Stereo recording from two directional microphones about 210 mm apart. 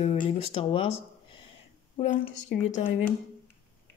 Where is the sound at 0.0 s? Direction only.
30° left (ahead or behind).